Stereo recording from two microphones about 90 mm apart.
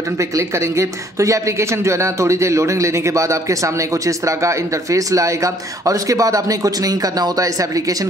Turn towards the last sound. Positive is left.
turn(degrees=-40)  # may be behind; listen again after turning